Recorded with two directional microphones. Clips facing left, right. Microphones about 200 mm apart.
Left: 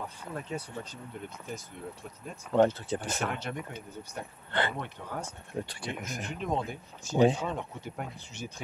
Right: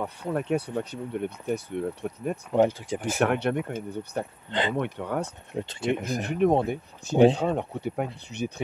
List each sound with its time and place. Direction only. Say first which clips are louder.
0.0 s speech: right 10 dB; 65° right (ahead or behind)
2.5 s speech: right 1 dB; 10° right (ahead or behind)
3.2 s speech: right 10 dB; 65° right (ahead or behind)
4.5 s speech: right 2 dB; 15° right (ahead or behind)
4.7 s speech: right 10 dB; 65° right (ahead or behind)
5.5 s speech: right 4 dB; 20° right (ahead or behind)
5.9 s speech: right 9 dB; 35° right (ahead or behind)
6.2 s speech: right 11 dB; 60° right (ahead or behind)